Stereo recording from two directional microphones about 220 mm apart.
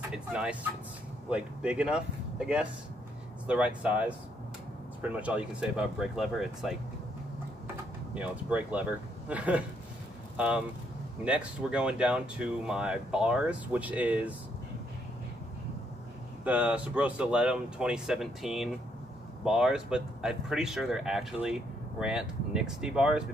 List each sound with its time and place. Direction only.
0.1 s speech: 5° right (ahead or behind)
7.6 s door: 5° right (ahead or behind)
9.3 s speech: 5° right (ahead or behind)
16.4 s speech: 5° right (ahead or behind)